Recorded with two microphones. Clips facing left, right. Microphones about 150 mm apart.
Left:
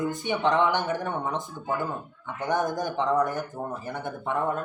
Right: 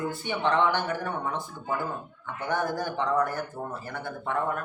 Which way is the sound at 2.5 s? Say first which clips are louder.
Left 2 dB; 15° left (ahead or behind).